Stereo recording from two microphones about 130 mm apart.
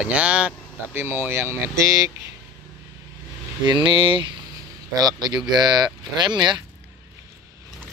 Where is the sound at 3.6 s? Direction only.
35° right (ahead or behind).